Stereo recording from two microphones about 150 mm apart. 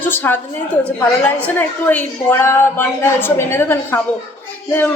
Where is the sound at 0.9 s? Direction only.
10° left (ahead or behind).